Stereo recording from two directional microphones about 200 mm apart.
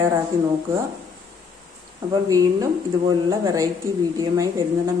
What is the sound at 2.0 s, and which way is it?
A woman's voice, 15° right (ahead or behind).